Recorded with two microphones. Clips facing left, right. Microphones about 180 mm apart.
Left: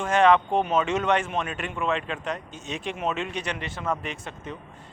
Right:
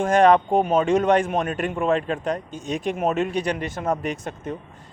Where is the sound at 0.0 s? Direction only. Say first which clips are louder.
Right 4 dB; 40° right (ahead or behind).